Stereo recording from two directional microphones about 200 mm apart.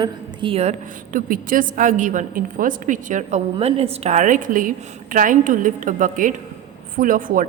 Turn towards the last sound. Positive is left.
turn(degrees=-40)  # may be behind; listen again after turning